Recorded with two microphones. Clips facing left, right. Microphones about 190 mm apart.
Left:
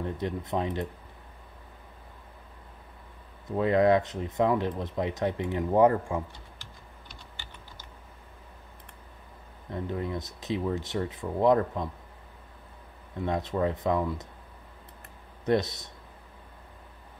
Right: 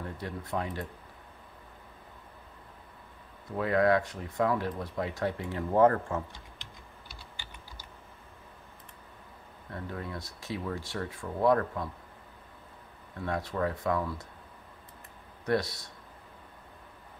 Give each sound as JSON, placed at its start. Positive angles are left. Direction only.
{"t": 0.0, "sound": "speech", "side_deg": 20}
{"t": 3.5, "sound": "speech", "side_deg": 20}
{"t": 9.7, "sound": "speech", "side_deg": 20}
{"t": 13.2, "sound": "speech", "side_deg": 20}
{"t": 15.4, "sound": "speech", "side_deg": 20}